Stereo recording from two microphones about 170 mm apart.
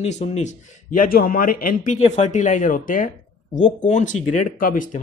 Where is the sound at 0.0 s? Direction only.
40° left (ahead or behind).